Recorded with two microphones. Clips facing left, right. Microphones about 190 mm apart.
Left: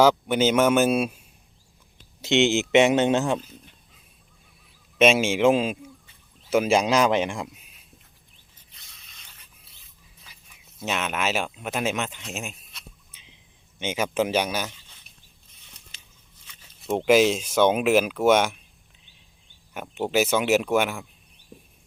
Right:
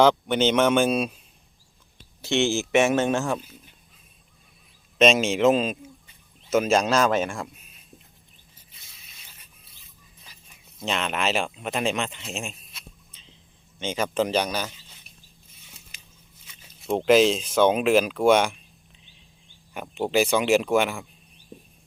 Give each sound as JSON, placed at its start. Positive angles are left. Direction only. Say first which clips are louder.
{"t": 0.0, "sound": "speech", "louder": "even", "side_deg": 5}
{"t": 2.2, "sound": "speech", "louder": "left 3 dB", "side_deg": 20}
{"t": 4.9, "sound": "speech", "louder": "even", "side_deg": 10}
{"t": 8.7, "sound": "zipper", "louder": "left 1 dB", "side_deg": 0}
{"t": 10.8, "sound": "speech", "louder": "even", "side_deg": 5}
{"t": 16.8, "sound": "speech", "louder": "right 1 dB", "side_deg": 0}
{"t": 19.7, "sound": "speech", "louder": "right 1 dB", "side_deg": 0}